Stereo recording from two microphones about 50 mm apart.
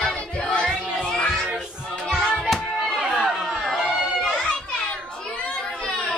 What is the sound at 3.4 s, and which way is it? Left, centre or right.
Music, centre.